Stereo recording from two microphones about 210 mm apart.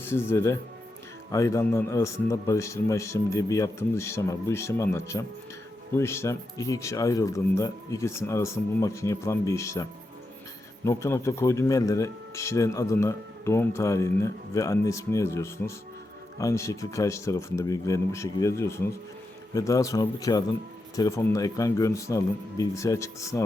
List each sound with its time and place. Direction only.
0.0 s a man's voice: 10° left (ahead or behind)